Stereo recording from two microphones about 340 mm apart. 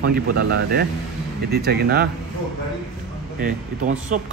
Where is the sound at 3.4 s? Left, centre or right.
Right.